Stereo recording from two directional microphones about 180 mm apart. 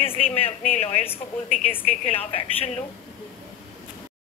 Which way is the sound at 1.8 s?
35° left (ahead or behind).